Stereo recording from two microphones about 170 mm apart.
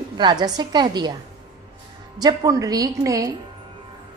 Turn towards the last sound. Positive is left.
turn(degrees=-20)  # may be behind; listen again after turning